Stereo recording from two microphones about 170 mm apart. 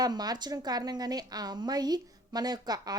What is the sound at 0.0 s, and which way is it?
A woman's voice, 25° right (ahead or behind).